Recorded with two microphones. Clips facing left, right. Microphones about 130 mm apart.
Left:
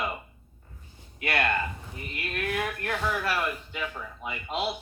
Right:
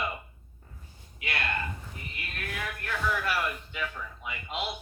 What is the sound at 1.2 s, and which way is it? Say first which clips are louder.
Speech: left 7 dB; 60° left (ahead or behind).